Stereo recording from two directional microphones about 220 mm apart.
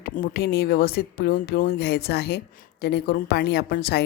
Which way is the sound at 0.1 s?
40° left (ahead or behind).